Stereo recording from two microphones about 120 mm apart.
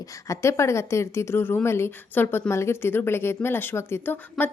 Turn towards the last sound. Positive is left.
turn(degrees=15)  # may be behind; listen again after turning